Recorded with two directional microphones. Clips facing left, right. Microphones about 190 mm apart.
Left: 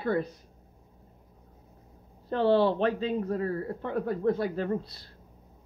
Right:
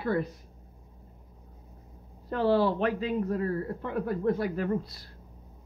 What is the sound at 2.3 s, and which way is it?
Speech, 30° left (ahead or behind).